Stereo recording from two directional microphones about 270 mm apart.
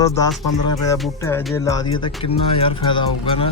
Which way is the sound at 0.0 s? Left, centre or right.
Centre.